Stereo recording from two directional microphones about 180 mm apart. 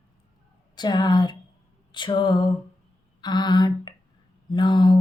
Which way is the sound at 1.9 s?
25° left (ahead or behind).